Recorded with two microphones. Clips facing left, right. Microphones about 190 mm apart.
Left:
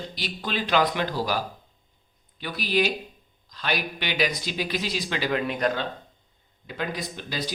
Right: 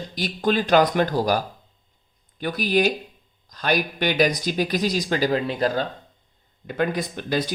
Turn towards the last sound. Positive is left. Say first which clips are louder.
# right 7 dB
turn(degrees=-50)  # may be behind; listen again after turning